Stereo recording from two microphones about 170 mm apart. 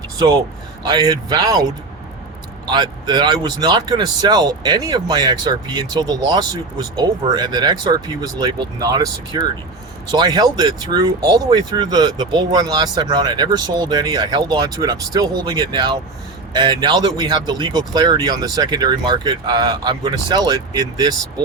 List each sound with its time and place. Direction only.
0.9 s speech: 25° right (ahead or behind)
2.6 s speech: 25° right (ahead or behind)